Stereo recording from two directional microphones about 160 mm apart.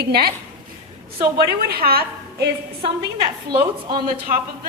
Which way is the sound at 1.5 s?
75° right (ahead or behind).